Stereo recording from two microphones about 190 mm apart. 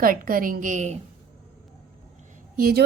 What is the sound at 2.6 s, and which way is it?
Speech, 50° right (ahead or behind).